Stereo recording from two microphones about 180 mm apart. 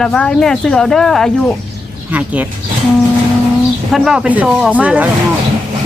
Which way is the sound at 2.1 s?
10° right (ahead or behind).